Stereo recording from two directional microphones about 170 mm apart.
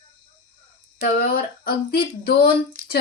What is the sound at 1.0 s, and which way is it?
Speech, 60° left (ahead or behind).